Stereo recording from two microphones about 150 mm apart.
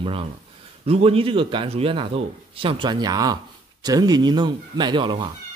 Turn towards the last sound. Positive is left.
turn(degrees=-35)  # may be behind; listen again after turning